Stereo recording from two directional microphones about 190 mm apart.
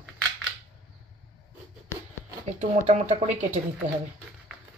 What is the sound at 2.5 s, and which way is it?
Speech, 40° right (ahead or behind).